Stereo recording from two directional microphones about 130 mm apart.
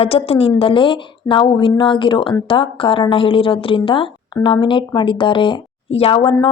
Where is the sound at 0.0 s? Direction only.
50° left (ahead or behind).